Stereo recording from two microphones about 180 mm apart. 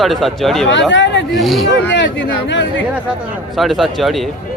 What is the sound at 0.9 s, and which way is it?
Hubbub, 80° left.